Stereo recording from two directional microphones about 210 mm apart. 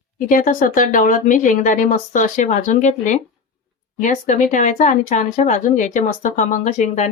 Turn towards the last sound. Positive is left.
turn(degrees=35)  # may be behind; listen again after turning